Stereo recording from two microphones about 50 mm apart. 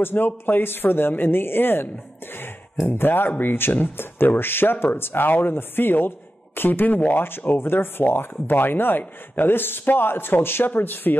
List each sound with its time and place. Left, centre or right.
0.0 s speech: left
7.2 s speech: left